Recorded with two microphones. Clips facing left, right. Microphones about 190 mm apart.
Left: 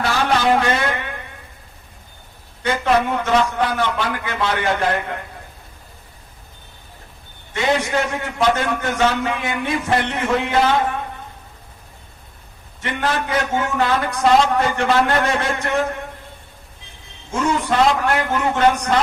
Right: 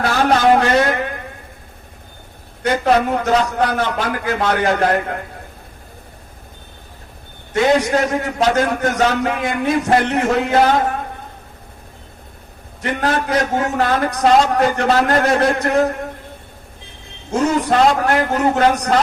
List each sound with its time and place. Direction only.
0.1 s a man's voice: 45° right (ahead or behind)
2.6 s a man's voice: 40° right (ahead or behind)
7.5 s a man's voice: 40° right (ahead or behind)
12.8 s a man's voice: 40° right (ahead or behind)
17.3 s a man's voice: 40° right (ahead or behind)